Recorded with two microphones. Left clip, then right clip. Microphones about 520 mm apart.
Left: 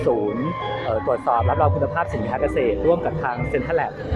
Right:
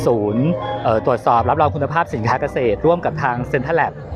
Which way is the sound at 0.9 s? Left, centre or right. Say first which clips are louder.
Right 6 dB; right.